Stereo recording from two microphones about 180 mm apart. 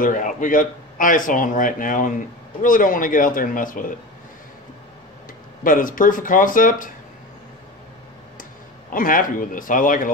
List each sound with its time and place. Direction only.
0.0 s speech: 45° left (ahead or behind)
5.6 s speech: 50° left (ahead or behind)
8.9 s speech: 50° left (ahead or behind)